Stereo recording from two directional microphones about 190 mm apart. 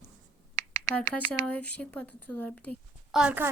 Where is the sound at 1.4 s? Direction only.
5° left (ahead or behind).